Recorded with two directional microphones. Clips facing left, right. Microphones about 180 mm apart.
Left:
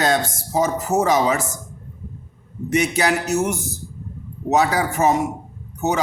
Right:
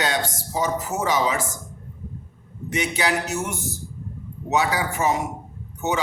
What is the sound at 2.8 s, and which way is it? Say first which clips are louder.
A man's voice: left 4 dB; 40° left (ahead or behind).